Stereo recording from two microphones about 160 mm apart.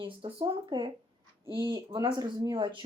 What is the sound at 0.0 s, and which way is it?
Speech, 35° right (ahead or behind).